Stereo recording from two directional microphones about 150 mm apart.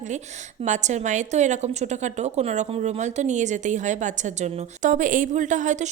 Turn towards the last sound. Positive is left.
turn(degrees=-55)  # may be behind; listen again after turning